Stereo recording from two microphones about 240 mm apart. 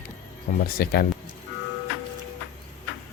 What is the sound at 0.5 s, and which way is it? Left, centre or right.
Humming, left.